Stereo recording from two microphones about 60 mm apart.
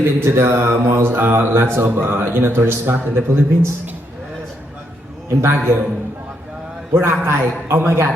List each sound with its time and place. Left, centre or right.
0.0 s speech: right
5.4 s speech: right
6.9 s a man's voice: right